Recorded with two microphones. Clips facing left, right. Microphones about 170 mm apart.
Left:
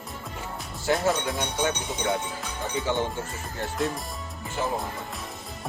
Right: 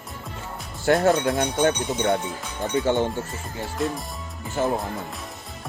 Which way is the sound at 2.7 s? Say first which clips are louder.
Right 6 dB; 50° right (ahead or behind).